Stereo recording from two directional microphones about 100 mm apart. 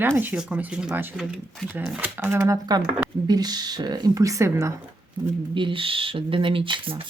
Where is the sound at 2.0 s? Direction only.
20° right (ahead or behind).